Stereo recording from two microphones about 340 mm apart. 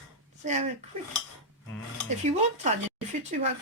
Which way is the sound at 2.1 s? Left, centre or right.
Centre.